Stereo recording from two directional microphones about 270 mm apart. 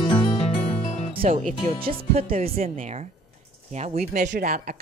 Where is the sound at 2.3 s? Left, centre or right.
Right.